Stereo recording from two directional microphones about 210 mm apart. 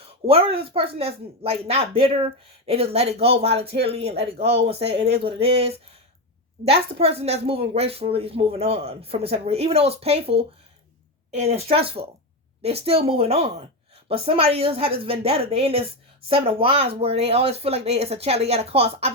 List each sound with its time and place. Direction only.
0.3 s speech: 25° right (ahead or behind)